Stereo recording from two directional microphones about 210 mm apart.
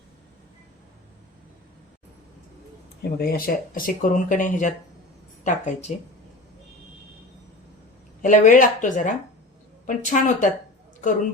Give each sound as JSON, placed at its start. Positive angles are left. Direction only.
{"t": 3.0, "sound": "speech", "side_deg": 45}
{"t": 8.2, "sound": "speech", "side_deg": 40}